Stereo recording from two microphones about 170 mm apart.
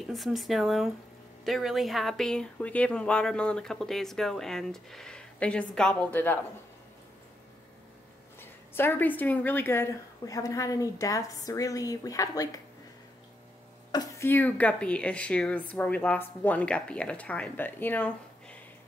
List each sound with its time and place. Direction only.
0.1 s speech: centre (ahead or behind)
8.4 s a woman's voice: 15° left (ahead or behind)
13.9 s speech: 15° left (ahead or behind)